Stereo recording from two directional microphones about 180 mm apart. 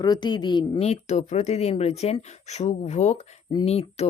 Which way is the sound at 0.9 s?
40° left (ahead or behind).